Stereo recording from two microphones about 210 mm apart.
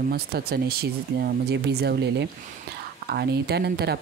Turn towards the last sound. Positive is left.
turn(degrees=-50)  # may be behind; listen again after turning